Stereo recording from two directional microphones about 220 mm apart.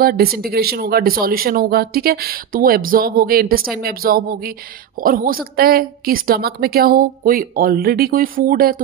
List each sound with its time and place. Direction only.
0.0 s speech: 45° right (ahead or behind)